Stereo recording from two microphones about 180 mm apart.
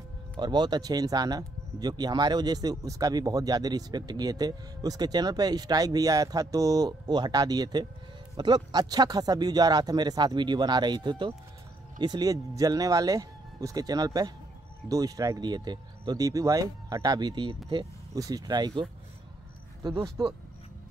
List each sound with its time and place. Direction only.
0.4 s speech: 25° right (ahead or behind)